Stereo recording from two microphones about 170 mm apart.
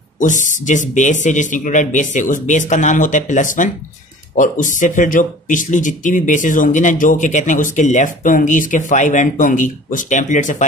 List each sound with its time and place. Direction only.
0.2 s speech: 50° left (ahead or behind)